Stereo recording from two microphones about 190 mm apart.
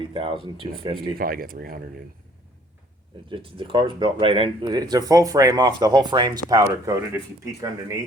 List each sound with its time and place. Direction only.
0.1 s speech: 30° right (ahead or behind)
1.1 s speech: 50° right (ahead or behind)
3.2 s speech: 25° right (ahead or behind)